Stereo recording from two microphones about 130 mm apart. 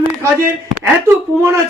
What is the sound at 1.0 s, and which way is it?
Speech, 25° right (ahead or behind).